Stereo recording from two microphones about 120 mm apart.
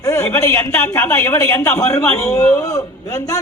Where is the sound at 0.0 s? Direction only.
25° left (ahead or behind).